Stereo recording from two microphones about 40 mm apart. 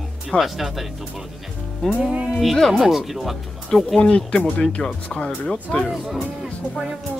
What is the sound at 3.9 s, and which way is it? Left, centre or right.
Speech, left.